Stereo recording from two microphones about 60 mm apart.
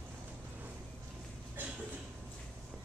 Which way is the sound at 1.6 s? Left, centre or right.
Right.